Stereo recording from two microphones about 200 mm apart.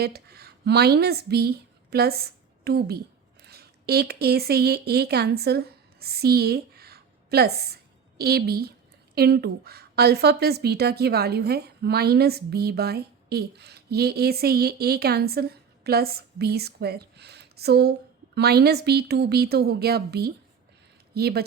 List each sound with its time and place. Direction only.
0.0 s a woman's voice: 50° right (ahead or behind)